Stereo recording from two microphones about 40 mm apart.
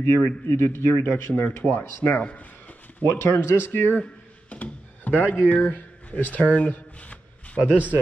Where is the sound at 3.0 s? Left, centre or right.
Left.